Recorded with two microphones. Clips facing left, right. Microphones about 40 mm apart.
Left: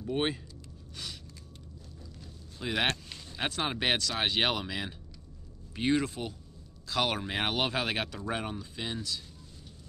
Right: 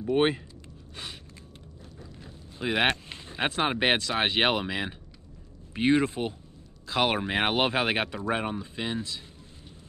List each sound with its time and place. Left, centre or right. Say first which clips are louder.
0.0 s speech: right 7 dB; right
2.6 s speech: right 5 dB; right